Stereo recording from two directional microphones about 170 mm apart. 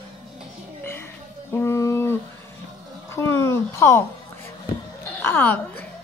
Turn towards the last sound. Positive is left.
turn(degrees=10)  # may be behind; listen again after turning